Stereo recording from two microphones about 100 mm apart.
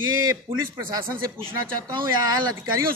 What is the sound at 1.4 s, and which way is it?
Speech, 65° right (ahead or behind).